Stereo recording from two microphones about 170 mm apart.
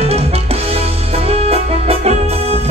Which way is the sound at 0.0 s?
35° right (ahead or behind).